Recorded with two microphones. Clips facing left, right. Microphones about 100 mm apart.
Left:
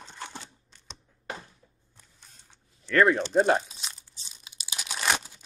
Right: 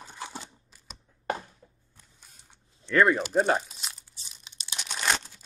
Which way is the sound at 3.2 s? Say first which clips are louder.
Left 2 dB; centre (ahead or behind).